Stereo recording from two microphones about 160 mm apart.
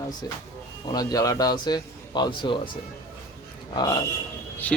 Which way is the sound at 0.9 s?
25° left (ahead or behind).